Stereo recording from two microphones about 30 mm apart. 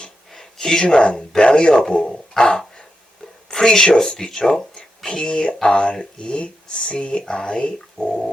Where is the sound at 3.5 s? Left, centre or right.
Centre; by 8.2 s left.